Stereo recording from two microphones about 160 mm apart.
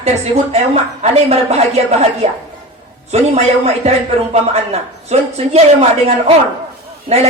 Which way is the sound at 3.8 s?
45° right (ahead or behind).